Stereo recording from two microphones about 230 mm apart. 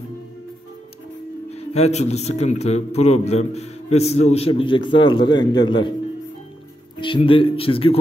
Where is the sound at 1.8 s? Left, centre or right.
Left.